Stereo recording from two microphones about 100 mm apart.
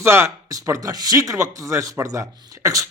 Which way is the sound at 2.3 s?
45° right (ahead or behind).